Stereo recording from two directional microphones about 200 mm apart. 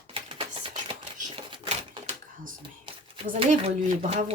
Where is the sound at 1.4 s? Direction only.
25° right (ahead or behind).